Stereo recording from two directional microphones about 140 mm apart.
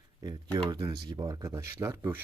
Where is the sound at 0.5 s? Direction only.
25° right (ahead or behind).